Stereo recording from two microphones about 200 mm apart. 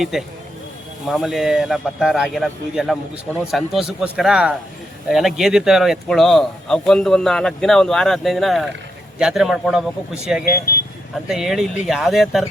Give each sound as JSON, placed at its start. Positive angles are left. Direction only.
{"t": 0.0, "sound": "speech", "side_deg": 0}
{"t": 10.4, "sound": "speech", "side_deg": 45}
{"t": 11.3, "sound": "speech", "side_deg": 0}